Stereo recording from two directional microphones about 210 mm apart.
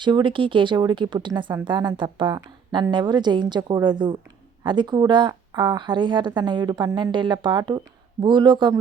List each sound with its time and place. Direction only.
0.0 s speech: 20° right (ahead or behind)